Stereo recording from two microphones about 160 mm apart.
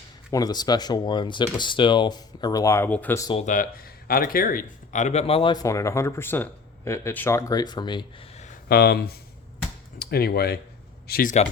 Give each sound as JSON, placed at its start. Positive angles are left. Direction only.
{"t": 0.3, "sound": "speech", "side_deg": 25}
{"t": 3.4, "sound": "speech", "side_deg": 55}
{"t": 8.7, "sound": "speech", "side_deg": 75}
{"t": 11.1, "sound": "speech", "side_deg": 60}